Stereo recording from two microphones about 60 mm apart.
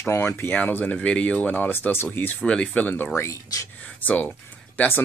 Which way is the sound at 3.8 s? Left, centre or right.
Left.